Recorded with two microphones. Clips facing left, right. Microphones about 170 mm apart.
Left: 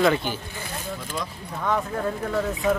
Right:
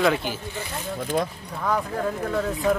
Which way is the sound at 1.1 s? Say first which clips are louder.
Right 8 dB; 50° right (ahead or behind).